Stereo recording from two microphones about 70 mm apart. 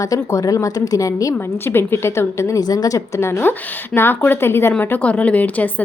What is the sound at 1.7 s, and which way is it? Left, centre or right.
Speech, left.